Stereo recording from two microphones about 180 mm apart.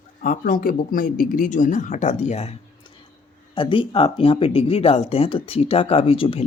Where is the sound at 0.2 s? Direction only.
50° left (ahead or behind).